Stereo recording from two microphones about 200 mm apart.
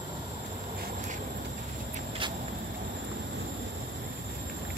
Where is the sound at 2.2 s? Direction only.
25° right (ahead or behind).